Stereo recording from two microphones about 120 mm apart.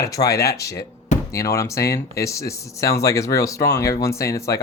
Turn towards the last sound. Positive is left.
turn(degrees=25)  # may be behind; listen again after turning